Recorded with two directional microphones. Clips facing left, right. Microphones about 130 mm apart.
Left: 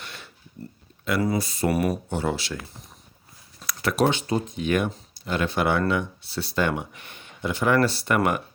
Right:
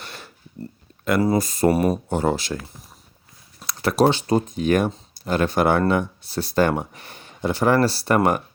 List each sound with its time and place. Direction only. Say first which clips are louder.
0.0 s a sound: right 3 dB; 40° right (ahead or behind)
1.2 s speech: right 6 dB; 40° right (ahead or behind)
1.7 s speech: right 1 dB; 30° right (ahead or behind)
2.0 s speech: right 5 dB; 45° right (ahead or behind)
3.7 s speech: right 4 dB; 35° right (ahead or behind)